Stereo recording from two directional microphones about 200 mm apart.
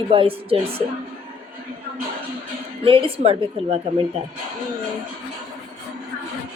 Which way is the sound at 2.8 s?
30° right (ahead or behind).